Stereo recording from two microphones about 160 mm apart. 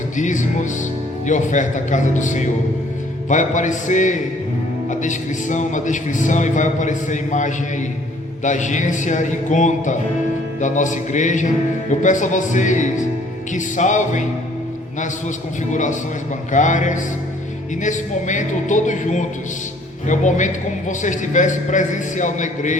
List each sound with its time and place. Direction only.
0.2 s speech: 50° left (ahead or behind)
15.7 s speech: 50° left (ahead or behind)